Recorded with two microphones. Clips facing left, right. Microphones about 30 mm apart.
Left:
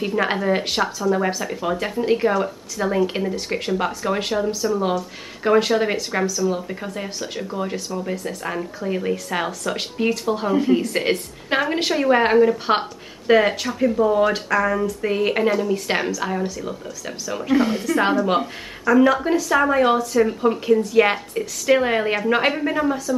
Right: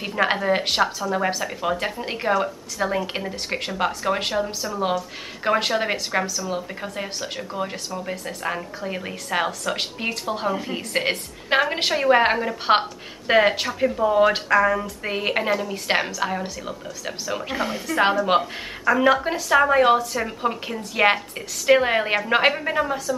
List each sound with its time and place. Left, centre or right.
0.0 s speech: centre
17.6 s speech: centre
17.8 s speech: centre